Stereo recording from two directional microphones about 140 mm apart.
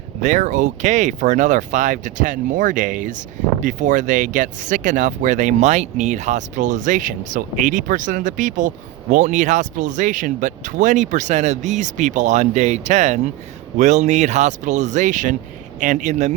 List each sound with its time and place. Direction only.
0.2 s speech: 60° right (ahead or behind)